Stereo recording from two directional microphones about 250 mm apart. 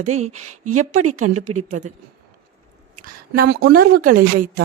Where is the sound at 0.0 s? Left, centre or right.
Right.